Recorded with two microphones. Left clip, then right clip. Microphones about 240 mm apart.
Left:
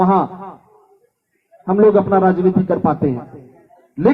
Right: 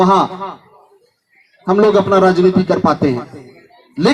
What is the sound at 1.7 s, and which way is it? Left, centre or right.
Speech, right.